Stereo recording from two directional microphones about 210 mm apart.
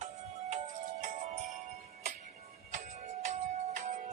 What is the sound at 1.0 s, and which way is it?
Music, 40° right (ahead or behind).